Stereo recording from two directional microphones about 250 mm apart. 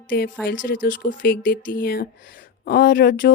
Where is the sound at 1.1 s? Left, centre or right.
Left.